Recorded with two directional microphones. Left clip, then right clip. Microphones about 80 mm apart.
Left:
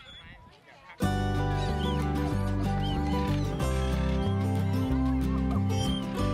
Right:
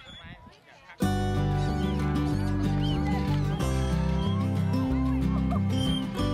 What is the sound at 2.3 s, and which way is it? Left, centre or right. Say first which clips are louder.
Music: right 2 dB; right.